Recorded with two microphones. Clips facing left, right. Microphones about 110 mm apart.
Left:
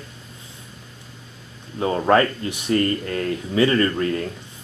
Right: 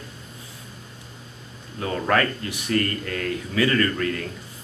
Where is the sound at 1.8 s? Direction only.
25° left (ahead or behind).